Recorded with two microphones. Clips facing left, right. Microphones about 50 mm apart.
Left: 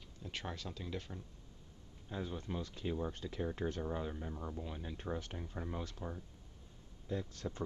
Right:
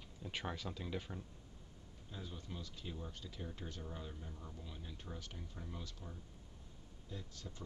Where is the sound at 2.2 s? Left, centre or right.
Left.